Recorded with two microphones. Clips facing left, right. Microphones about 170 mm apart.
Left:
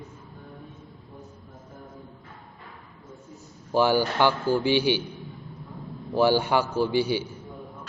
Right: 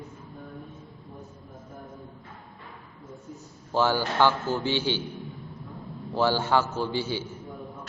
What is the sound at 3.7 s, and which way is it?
A man's voice, 15° left (ahead or behind).